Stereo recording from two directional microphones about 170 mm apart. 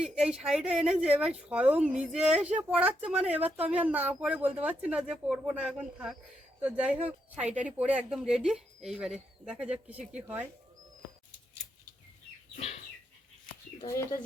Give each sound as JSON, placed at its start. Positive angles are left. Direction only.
{"t": 0.0, "sound": "speech", "side_deg": -5}
{"t": 13.8, "sound": "speech", "side_deg": 20}